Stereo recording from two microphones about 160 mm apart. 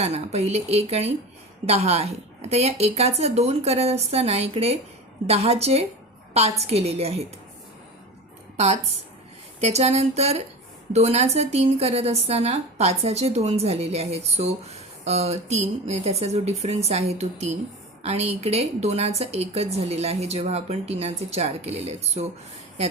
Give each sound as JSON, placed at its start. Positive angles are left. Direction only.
{"t": 0.0, "sound": "a woman's voice", "side_deg": -40}
{"t": 8.5, "sound": "a woman's voice", "side_deg": -40}